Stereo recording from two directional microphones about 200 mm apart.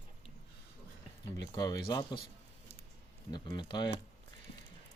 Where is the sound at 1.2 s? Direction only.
20° left (ahead or behind).